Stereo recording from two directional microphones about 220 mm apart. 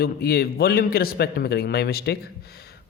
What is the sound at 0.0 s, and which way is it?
A man's voice, 45° left (ahead or behind).